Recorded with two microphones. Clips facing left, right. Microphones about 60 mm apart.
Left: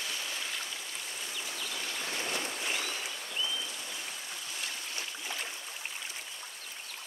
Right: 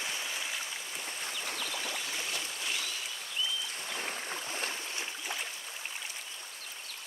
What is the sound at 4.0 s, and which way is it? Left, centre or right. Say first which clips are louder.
Stream: right 5 dB; right.